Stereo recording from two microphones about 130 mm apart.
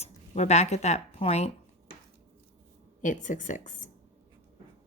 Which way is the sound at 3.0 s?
75° left (ahead or behind).